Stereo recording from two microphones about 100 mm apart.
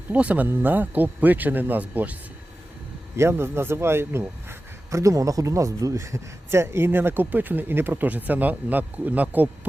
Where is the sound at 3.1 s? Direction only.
25° right (ahead or behind).